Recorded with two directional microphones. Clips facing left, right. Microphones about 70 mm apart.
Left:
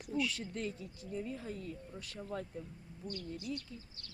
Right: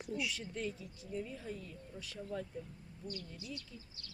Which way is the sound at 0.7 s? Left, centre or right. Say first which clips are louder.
Left 1 dB; left.